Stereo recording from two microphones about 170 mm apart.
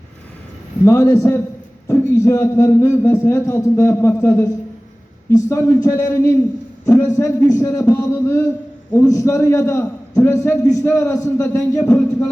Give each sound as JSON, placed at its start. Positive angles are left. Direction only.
{"t": 0.9, "sound": "a man's voice", "side_deg": 20}